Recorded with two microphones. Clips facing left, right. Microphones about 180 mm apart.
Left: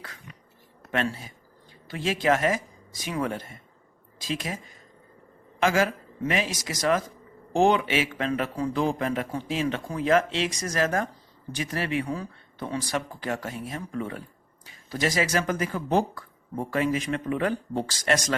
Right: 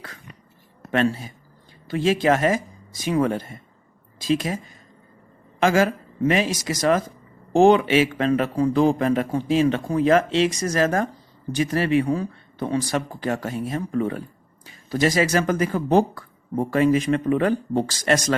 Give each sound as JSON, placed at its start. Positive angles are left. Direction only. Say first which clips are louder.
{"t": 0.8, "sound": "a sound", "louder": "right 6 dB", "side_deg": -40}
{"t": 1.9, "sound": "a man's voice", "louder": "right 5 dB", "side_deg": -30}
{"t": 5.5, "sound": "a man's voice", "louder": "right 4 dB", "side_deg": -35}